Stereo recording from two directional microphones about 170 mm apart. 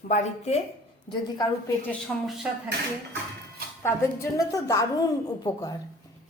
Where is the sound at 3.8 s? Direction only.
15° left (ahead or behind).